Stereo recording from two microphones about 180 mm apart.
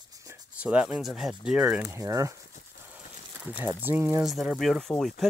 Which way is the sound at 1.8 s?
15° right (ahead or behind).